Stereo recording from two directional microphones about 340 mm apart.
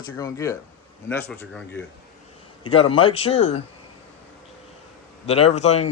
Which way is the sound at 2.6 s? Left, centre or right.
Centre.